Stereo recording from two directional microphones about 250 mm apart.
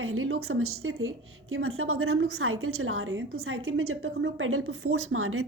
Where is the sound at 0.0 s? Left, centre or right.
Right.